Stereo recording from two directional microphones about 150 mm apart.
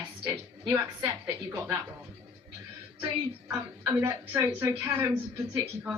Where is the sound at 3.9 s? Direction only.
20° right (ahead or behind).